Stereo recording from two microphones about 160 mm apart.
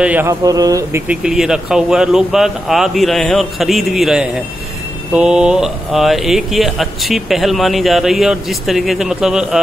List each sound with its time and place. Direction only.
0.0 s speech: 10° right (ahead or behind)
1.0 s speech: 5° right (ahead or behind)